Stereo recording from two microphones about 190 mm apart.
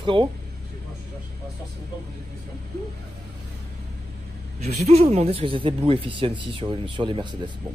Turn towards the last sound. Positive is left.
turn(degrees=-25)  # may be behind; listen again after turning